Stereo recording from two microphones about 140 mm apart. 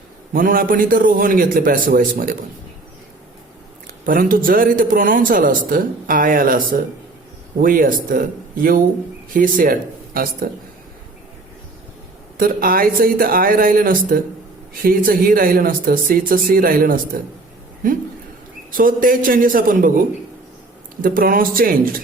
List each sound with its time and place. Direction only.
0.3 s speech: 80° right
4.0 s speech: 85° right
10.4 s speech: 90° right
12.4 s speech: 90° right
18.7 s speech: 80° right